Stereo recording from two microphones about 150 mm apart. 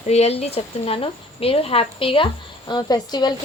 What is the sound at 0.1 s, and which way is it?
Speech, 45° left (ahead or behind).